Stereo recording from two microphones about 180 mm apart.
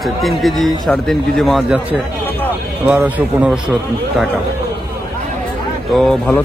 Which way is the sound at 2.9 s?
10° right (ahead or behind).